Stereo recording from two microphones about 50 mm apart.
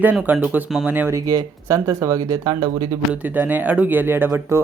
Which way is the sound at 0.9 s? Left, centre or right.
Right.